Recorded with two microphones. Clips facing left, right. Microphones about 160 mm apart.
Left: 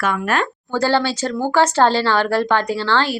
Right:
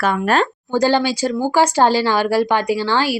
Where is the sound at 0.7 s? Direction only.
15° right (ahead or behind).